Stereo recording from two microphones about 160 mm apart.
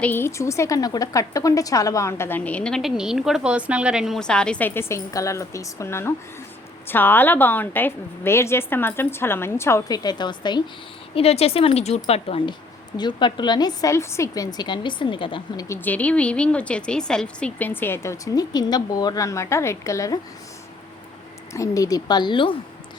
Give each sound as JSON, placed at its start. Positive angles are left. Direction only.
{"t": 0.0, "sound": "a woman's voice", "side_deg": 15}
{"t": 11.1, "sound": "a woman's voice", "side_deg": 40}
{"t": 15.6, "sound": "a woman's voice", "side_deg": 15}
{"t": 21.5, "sound": "a woman's voice", "side_deg": 20}